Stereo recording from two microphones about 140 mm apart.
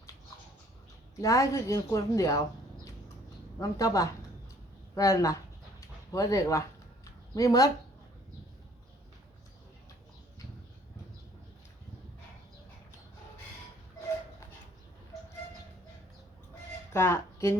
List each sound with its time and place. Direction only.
1.2 s a woman's voice: 20° left (ahead or behind)
3.6 s a woman's voice: 25° left (ahead or behind)
6.1 s a sound: 25° left (ahead or behind)
16.9 s a woman's voice: 20° left (ahead or behind)